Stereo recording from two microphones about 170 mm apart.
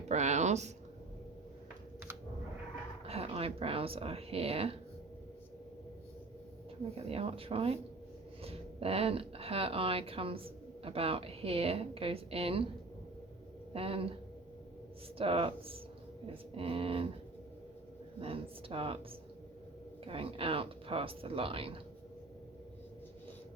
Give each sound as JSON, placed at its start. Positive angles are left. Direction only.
{"t": 0.1, "sound": "a sound", "side_deg": -40}
{"t": 3.1, "sound": "speech", "side_deg": -35}
{"t": 6.9, "sound": "a woman's voice", "side_deg": -35}
{"t": 13.7, "sound": "a woman's voice", "side_deg": -35}
{"t": 15.2, "sound": "a woman's voice", "side_deg": -35}
{"t": 18.2, "sound": "a woman's voice", "side_deg": -35}
{"t": 20.1, "sound": "a woman's voice", "side_deg": -35}